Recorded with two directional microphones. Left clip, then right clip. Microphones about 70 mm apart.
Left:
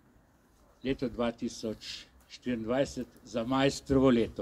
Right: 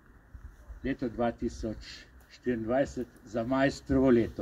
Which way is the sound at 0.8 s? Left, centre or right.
Left.